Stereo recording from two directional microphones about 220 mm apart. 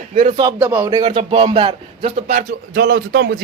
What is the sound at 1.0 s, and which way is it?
Speech, 25° right (ahead or behind).